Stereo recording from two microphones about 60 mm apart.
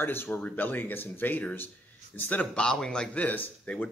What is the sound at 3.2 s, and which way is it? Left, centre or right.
Speech, left.